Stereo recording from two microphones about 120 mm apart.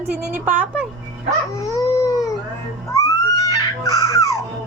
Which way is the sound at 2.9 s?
30° left (ahead or behind).